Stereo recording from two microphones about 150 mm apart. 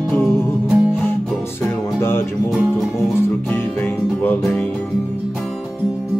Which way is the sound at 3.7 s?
15° left (ahead or behind).